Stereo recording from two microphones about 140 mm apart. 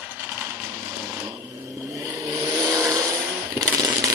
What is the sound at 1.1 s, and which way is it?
Vehicle, 25° right (ahead or behind).